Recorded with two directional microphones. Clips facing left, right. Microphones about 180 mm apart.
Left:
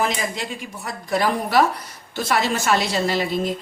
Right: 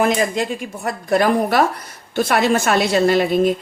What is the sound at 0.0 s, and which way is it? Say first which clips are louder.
A woman's voice: right 7 dB; 55° right (ahead or behind).